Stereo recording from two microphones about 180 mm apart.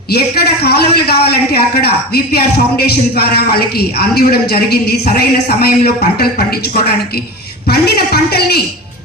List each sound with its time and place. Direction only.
0.1 s a man's voice: 65° left (ahead or behind)
7.7 s a man's voice: 60° left (ahead or behind)